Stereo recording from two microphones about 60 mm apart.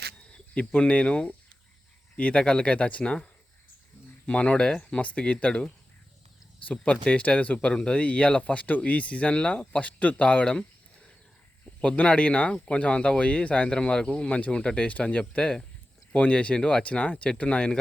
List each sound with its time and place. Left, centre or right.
0.5 s speech: left
4.3 s speech: left